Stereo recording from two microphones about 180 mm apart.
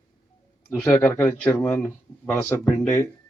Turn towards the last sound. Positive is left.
turn(degrees=10)  # may be behind; listen again after turning